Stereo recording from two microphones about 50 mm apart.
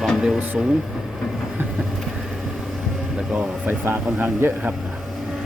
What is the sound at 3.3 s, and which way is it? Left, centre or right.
Speech, right.